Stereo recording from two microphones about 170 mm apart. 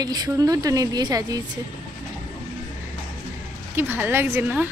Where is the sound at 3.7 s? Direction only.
10° right (ahead or behind).